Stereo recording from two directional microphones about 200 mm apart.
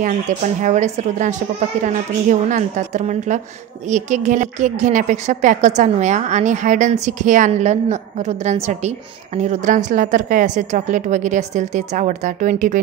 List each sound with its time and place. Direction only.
0.6 s a woman's voice: 35° right (ahead or behind)